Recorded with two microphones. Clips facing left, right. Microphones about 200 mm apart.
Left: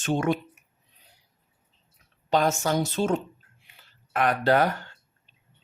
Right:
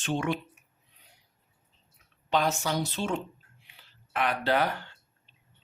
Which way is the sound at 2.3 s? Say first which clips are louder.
Left 4 dB; 45° left (ahead or behind).